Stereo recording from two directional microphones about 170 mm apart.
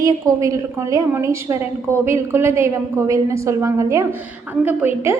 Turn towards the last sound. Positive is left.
turn(degrees=-10)  # may be behind; listen again after turning